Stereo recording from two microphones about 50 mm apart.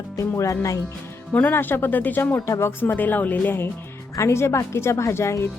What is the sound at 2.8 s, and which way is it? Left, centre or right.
Speech, left.